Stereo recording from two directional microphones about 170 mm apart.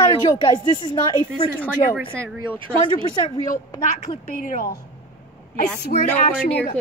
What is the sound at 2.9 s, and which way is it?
Speech, 25° left (ahead or behind).